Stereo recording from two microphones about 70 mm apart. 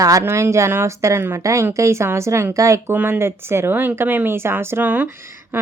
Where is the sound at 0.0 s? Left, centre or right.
Right.